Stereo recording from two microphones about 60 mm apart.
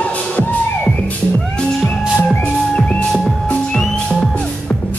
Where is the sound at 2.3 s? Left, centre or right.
Left.